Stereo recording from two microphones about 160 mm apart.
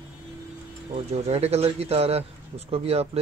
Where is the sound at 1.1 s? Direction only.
40° right (ahead or behind).